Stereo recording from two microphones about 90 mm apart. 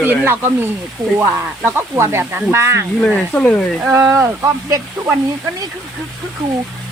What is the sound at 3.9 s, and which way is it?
Speech, 35° right (ahead or behind).